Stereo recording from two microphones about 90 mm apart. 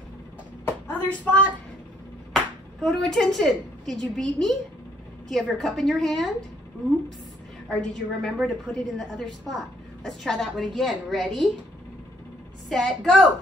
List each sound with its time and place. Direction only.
0.7 s a woman's voice: 20° left (ahead or behind)
2.3 s a woman's voice: 5° left (ahead or behind)
7.8 s a woman's voice: 5° left (ahead or behind)
12.6 s a woman's voice: centre (ahead or behind)